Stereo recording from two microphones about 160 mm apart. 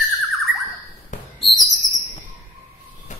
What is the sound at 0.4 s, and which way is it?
Bird, centre (ahead or behind).